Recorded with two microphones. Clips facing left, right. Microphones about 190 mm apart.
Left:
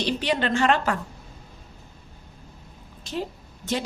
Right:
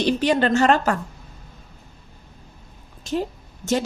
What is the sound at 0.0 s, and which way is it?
Speech, 45° right (ahead or behind).